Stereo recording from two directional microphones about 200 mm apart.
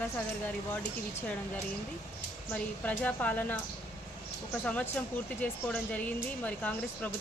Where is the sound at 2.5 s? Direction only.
5° left (ahead or behind).